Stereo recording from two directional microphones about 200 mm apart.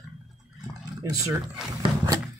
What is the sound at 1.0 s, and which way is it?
Speech, 15° right (ahead or behind).